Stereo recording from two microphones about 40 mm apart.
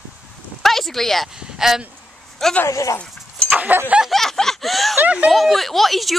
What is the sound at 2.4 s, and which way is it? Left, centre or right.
Speech, centre.